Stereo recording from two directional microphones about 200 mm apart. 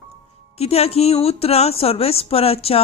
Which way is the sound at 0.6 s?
30° left (ahead or behind).